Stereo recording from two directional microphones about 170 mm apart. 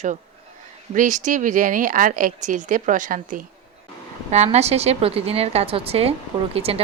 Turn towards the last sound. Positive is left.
turn(degrees=-35)  # may be behind; listen again after turning